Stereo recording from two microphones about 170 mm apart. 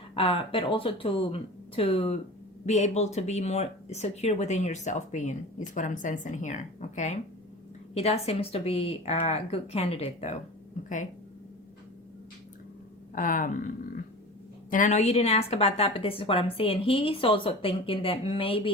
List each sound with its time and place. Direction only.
0.1 s a woman's voice: 30° left (ahead or behind)
13.1 s a woman's voice: 50° left (ahead or behind); by 18.7 s 30° left (ahead or behind)